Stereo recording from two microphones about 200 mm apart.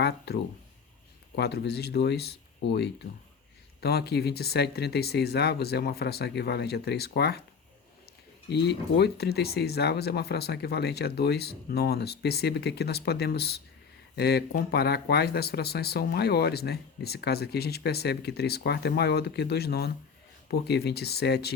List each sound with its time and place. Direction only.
0.3 s speech: 55° left (ahead or behind)
8.4 s speech: 55° left (ahead or behind)